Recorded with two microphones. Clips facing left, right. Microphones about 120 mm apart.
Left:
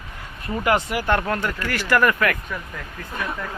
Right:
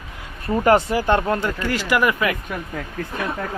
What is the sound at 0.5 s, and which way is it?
Speech, 35° right (ahead or behind).